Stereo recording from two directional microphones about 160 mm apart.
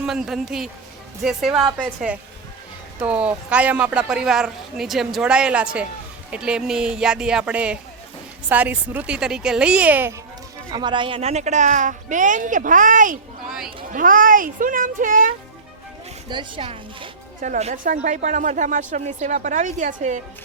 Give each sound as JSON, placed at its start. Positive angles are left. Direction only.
{"t": 0.0, "sound": "speech", "side_deg": -5}
{"t": 10.7, "sound": "a child's voice", "side_deg": -30}
{"t": 16.3, "sound": "speech", "side_deg": -30}
{"t": 17.4, "sound": "speech", "side_deg": -50}